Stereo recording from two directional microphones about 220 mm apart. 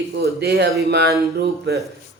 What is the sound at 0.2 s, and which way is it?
Speech, 50° right (ahead or behind).